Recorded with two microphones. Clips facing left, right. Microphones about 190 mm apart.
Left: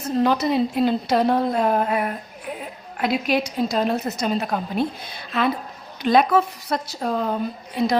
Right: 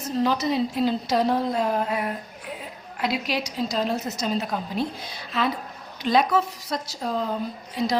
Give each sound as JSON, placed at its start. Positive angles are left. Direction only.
{"t": 0.2, "sound": "a woman's voice", "side_deg": 55}